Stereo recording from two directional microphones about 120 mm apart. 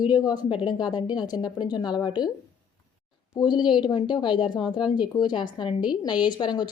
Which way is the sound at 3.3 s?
40° left (ahead or behind).